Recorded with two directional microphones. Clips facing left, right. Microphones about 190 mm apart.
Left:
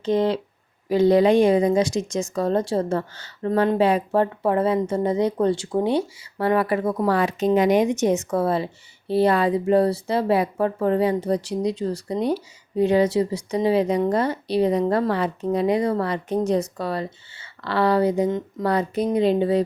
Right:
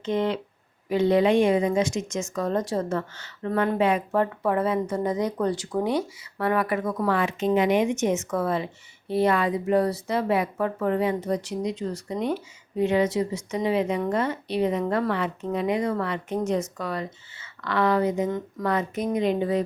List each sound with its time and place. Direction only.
0.0 s speech: 35° left (ahead or behind)